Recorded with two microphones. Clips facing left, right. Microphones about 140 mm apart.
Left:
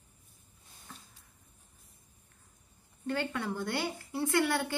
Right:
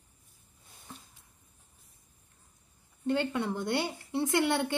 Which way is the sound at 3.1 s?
25° right (ahead or behind).